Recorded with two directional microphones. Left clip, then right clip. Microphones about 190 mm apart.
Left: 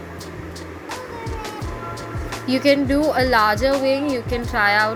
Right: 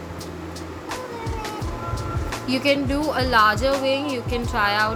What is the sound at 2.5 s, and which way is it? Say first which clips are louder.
Speech: left 4 dB; 15° left (ahead or behind).